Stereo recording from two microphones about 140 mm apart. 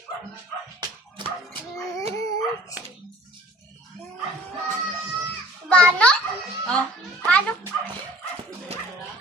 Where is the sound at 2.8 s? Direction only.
10° right (ahead or behind).